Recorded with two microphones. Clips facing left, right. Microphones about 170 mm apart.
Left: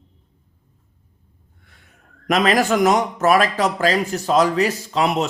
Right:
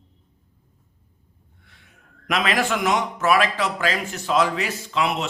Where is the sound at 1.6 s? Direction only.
45° left (ahead or behind).